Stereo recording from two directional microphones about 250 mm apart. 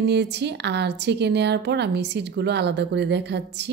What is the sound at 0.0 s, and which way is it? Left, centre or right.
A woman's voice, right.